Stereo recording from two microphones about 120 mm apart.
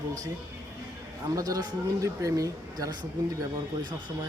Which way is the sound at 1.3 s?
30° right (ahead or behind).